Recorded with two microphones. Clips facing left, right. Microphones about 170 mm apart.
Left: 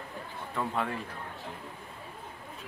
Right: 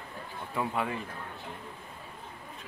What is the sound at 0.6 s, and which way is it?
Speech, 5° right (ahead or behind).